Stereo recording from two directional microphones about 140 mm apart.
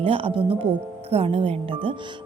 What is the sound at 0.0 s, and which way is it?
Speech, 40° right (ahead or behind).